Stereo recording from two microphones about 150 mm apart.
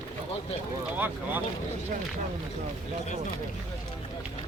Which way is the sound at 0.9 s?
10° right (ahead or behind).